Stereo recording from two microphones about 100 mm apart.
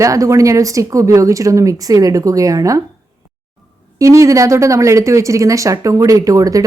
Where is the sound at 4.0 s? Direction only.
30° right (ahead or behind).